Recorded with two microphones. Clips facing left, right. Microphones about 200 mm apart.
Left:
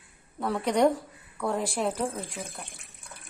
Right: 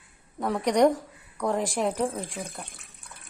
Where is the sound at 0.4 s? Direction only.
15° right (ahead or behind).